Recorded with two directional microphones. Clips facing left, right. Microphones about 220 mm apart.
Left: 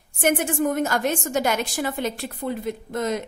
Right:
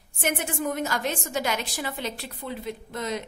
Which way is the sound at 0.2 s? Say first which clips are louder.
Left 7 dB; 50° left (ahead or behind).